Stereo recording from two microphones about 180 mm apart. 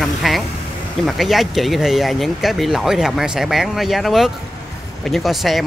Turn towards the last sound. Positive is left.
turn(degrees=0)  # may be behind; listen again after turning